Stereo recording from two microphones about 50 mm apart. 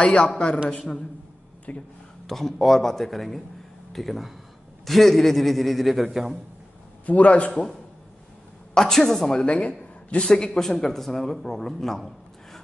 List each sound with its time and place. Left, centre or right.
0.0 s a man's voice: left
2.2 s a man's voice: centre
7.1 s a man's voice: left
8.7 s a woman's voice: centre
9.5 s a man's voice: left
9.8 s a sound: left
10.2 s a woman's voice: centre